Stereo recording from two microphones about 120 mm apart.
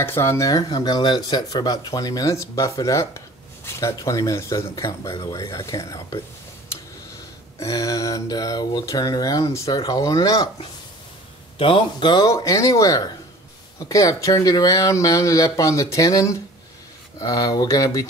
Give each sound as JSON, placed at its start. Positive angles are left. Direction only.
{"t": 0.0, "sound": "speech", "side_deg": 20}
{"t": 7.5, "sound": "speech", "side_deg": 30}
{"t": 11.5, "sound": "a man's voice", "side_deg": 45}
{"t": 12.3, "sound": "speech", "side_deg": 30}